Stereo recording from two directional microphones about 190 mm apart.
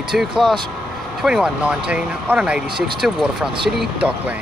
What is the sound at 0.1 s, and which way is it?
Speech, 5° right (ahead or behind).